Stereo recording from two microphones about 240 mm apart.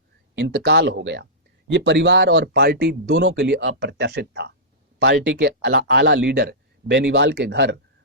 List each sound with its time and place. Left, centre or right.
0.3 s speech: right